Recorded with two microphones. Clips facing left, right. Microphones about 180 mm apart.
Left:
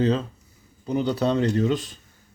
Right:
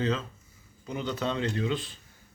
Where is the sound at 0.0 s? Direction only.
35° left (ahead or behind).